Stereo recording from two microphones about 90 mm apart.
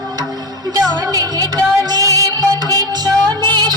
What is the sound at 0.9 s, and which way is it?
Music, 45° right (ahead or behind).